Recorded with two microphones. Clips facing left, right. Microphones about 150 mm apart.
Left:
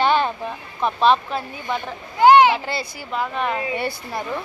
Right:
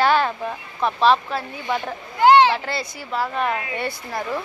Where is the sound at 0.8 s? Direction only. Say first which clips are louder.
Even; centre (ahead or behind).